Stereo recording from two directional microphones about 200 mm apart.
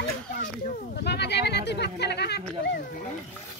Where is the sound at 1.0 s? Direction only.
55° left (ahead or behind).